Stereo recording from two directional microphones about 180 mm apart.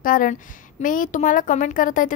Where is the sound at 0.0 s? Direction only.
50° left (ahead or behind).